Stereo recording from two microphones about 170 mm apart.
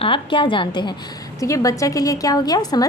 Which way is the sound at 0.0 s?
30° left (ahead or behind).